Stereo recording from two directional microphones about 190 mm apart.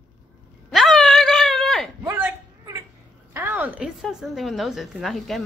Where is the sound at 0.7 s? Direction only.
Centre (ahead or behind).